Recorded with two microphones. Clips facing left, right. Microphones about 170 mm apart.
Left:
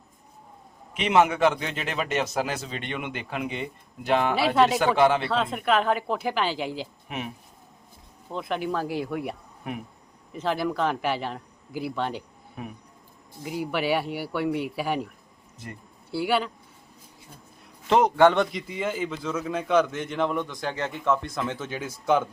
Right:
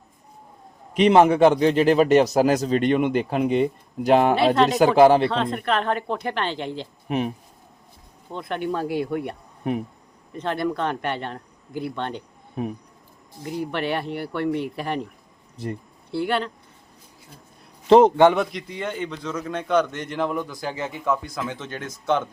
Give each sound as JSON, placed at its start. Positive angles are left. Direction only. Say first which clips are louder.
{"t": 0.9, "sound": "a man's voice", "louder": "right 6 dB", "side_deg": -35}
{"t": 4.4, "sound": "a man's voice", "louder": "right 3 dB", "side_deg": 5}
{"t": 4.8, "sound": "a man's voice", "louder": "right 6 dB", "side_deg": -35}
{"t": 5.2, "sound": "a man's voice", "louder": "right 3 dB", "side_deg": 5}
{"t": 7.1, "sound": "a man's voice", "louder": "right 11 dB", "side_deg": -35}
{"t": 8.3, "sound": "a man's voice", "louder": "right 1 dB", "side_deg": 0}
{"t": 10.3, "sound": "a man's voice", "louder": "right 1 dB", "side_deg": 5}
{"t": 12.6, "sound": "a man's voice", "louder": "right 9 dB", "side_deg": -30}
{"t": 13.4, "sound": "a man's voice", "louder": "right 1 dB", "side_deg": 5}
{"t": 16.1, "sound": "a man's voice", "louder": "right 1 dB", "side_deg": 5}
{"t": 17.8, "sound": "a man's voice", "louder": "right 8 dB", "side_deg": -35}
{"t": 18.3, "sound": "a man's voice", "louder": "even", "side_deg": 0}